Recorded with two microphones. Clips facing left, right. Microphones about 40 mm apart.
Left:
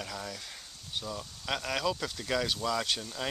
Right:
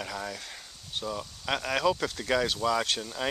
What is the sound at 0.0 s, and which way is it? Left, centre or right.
Speech, centre.